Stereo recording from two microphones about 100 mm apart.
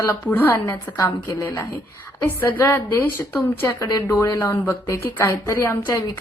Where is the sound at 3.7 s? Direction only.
35° left (ahead or behind).